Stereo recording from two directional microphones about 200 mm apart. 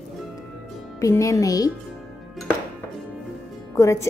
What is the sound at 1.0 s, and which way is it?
Speech, 15° left (ahead or behind).